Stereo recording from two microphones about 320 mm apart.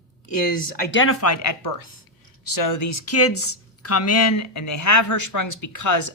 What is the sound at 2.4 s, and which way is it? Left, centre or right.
Speech, left.